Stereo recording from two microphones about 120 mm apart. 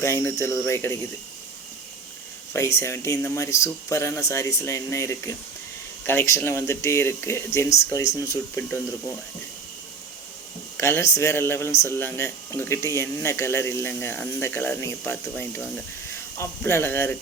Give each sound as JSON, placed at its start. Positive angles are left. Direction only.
{"t": 0.0, "sound": "speech", "side_deg": 20}
{"t": 2.5, "sound": "speech", "side_deg": 20}
{"t": 10.8, "sound": "speech", "side_deg": 20}